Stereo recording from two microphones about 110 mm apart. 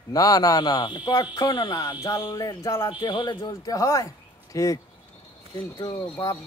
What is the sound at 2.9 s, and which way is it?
A man's voice, 40° left (ahead or behind).